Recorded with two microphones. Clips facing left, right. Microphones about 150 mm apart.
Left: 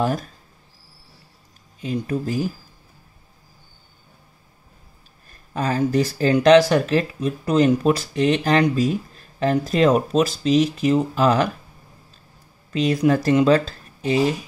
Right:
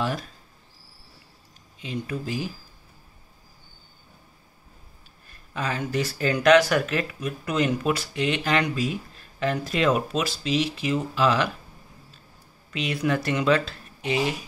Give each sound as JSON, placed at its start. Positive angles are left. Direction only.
{"t": 0.0, "sound": "speech", "side_deg": 45}
{"t": 1.8, "sound": "speech", "side_deg": 40}
{"t": 5.5, "sound": "speech", "side_deg": 40}
{"t": 12.7, "sound": "speech", "side_deg": 40}